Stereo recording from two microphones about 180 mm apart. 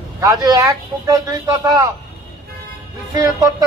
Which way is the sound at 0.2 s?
20° right (ahead or behind).